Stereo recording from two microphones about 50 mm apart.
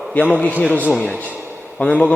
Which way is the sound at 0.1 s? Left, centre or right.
Left.